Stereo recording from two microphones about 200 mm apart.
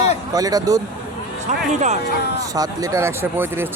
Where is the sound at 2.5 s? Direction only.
20° right (ahead or behind).